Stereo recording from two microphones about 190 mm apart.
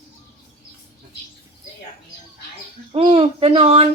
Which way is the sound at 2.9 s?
35° right (ahead or behind).